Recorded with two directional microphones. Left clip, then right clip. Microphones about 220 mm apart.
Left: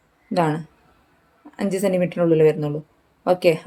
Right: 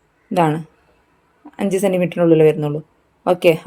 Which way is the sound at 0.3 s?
15° right (ahead or behind).